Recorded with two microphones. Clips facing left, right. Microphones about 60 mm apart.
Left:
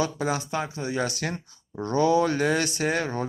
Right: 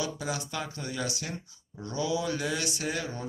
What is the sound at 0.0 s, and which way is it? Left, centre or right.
Speech, left.